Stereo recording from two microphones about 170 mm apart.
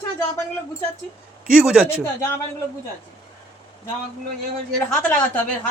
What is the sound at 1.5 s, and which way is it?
Speech, 5° right (ahead or behind).